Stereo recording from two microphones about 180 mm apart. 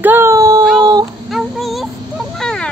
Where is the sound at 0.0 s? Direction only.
10° right (ahead or behind).